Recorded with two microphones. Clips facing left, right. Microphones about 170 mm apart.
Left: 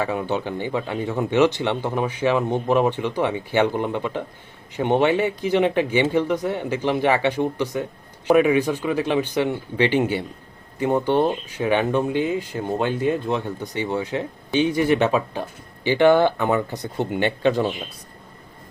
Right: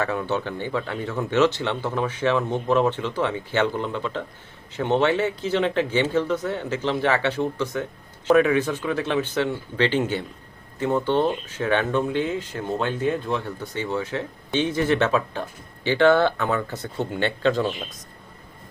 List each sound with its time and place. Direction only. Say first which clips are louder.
0.0 s speech: left 1 dB; 15° left (ahead or behind)